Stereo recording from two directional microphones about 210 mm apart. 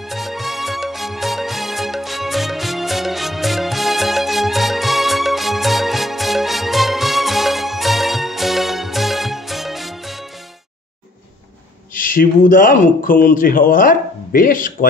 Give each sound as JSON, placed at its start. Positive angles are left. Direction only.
{"t": 0.1, "sound": "music", "side_deg": 0}
{"t": 11.9, "sound": "speech", "side_deg": 40}